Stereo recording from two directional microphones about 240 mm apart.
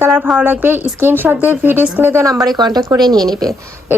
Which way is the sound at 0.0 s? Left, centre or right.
Centre.